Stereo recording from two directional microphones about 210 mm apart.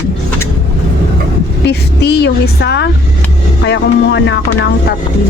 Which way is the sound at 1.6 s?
50° left (ahead or behind).